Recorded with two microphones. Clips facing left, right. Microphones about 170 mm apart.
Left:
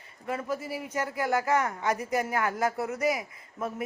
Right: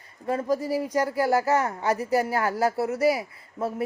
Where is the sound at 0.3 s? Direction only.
35° right (ahead or behind).